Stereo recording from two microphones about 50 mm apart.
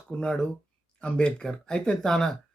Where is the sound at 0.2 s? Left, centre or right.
Centre.